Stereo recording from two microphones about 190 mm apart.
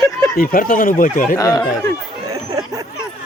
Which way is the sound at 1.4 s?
20° left (ahead or behind).